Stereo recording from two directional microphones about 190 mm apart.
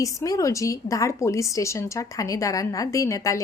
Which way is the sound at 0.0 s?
15° left (ahead or behind).